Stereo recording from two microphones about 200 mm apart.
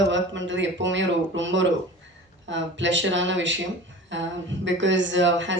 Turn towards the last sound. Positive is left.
turn(degrees=-65)  # may be behind; listen again after turning